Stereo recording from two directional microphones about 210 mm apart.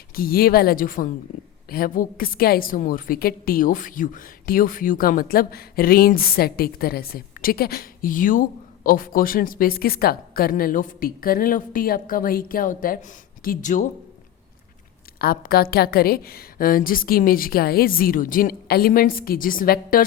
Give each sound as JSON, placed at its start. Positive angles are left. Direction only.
{"t": 0.1, "sound": "a woman's voice", "side_deg": 45}
{"t": 15.2, "sound": "a woman's voice", "side_deg": 45}